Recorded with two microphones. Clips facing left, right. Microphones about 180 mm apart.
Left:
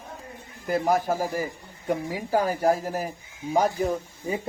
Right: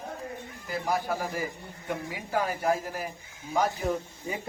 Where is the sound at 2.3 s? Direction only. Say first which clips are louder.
Left 5 dB; 35° left (ahead or behind).